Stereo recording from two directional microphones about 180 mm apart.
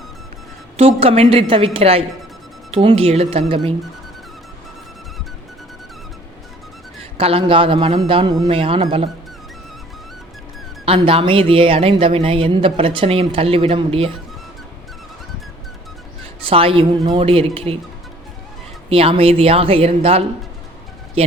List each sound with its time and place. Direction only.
0.8 s speech: 35° right (ahead or behind)
7.2 s a man's voice: 35° right (ahead or behind)
10.8 s speech: 30° right (ahead or behind)
16.4 s speech: 30° right (ahead or behind)
18.9 s speech: 30° right (ahead or behind)